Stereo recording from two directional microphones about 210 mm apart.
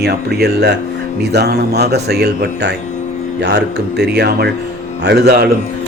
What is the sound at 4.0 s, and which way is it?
Speech, 50° right (ahead or behind).